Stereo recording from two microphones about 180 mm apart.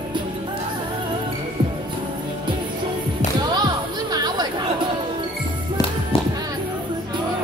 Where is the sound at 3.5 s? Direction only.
20° right (ahead or behind).